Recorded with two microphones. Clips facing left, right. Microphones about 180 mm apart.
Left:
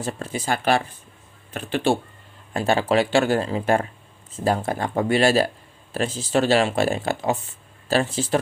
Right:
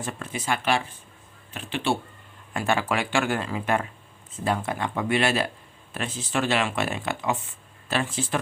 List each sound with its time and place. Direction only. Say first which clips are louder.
0.0 s speech: left 4 dB; 35° left (ahead or behind)
2.5 s speech: left 5 dB; 30° left (ahead or behind)